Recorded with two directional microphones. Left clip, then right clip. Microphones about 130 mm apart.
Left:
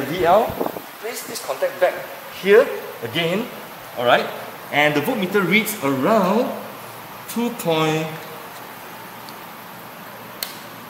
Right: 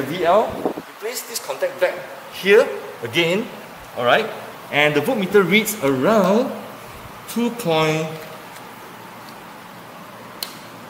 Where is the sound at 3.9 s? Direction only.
30° right (ahead or behind).